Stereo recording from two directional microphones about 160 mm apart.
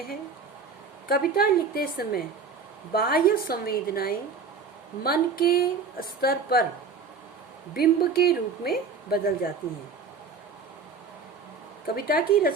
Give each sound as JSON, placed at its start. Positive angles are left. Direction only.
{"t": 1.0, "sound": "speech", "side_deg": 70}
{"t": 7.7, "sound": "speech", "side_deg": 75}
{"t": 11.9, "sound": "speech", "side_deg": 70}